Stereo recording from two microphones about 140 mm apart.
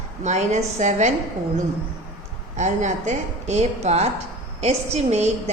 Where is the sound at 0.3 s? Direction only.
55° right (ahead or behind).